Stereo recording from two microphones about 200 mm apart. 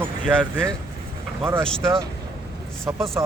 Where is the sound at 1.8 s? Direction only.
15° right (ahead or behind).